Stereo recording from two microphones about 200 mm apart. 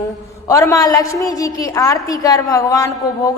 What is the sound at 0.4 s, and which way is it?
A woman's voice, 15° left (ahead or behind).